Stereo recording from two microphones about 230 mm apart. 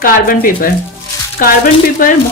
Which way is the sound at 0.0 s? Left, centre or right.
Left.